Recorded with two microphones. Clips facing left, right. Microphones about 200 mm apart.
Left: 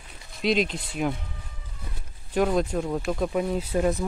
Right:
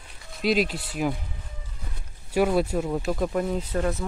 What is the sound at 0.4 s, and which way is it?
Speech, 5° right (ahead or behind).